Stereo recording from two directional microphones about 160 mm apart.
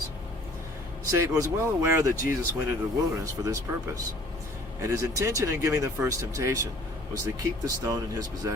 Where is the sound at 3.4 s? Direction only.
25° right (ahead or behind).